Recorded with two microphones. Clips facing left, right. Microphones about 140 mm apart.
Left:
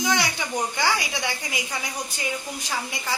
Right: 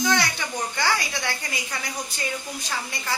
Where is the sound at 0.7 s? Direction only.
15° left (ahead or behind).